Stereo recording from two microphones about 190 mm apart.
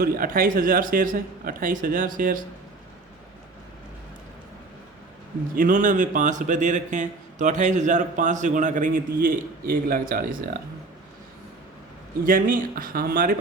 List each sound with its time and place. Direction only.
0.0 s speech: 50° right (ahead or behind)
5.5 s a man's voice: 45° right (ahead or behind)
12.2 s speech: 45° right (ahead or behind)